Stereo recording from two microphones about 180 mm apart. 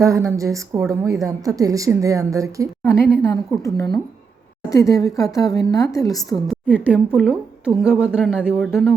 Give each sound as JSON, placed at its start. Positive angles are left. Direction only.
{"t": 0.0, "sound": "a woman's voice", "side_deg": -15}
{"t": 3.2, "sound": "a woman's voice", "side_deg": 15}
{"t": 6.5, "sound": "a woman's voice", "side_deg": -5}